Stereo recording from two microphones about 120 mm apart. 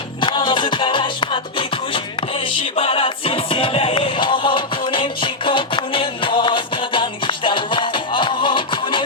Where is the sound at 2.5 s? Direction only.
50° left (ahead or behind).